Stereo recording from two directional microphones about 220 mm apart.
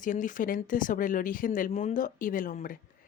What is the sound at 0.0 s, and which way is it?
Speech, 35° left (ahead or behind).